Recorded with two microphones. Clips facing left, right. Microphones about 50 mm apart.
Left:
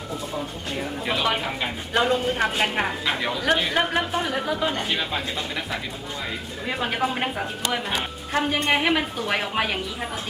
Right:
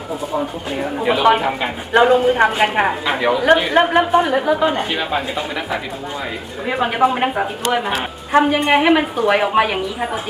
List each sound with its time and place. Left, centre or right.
0.3 s speech: centre
2.0 s speech: centre
6.7 s speech: centre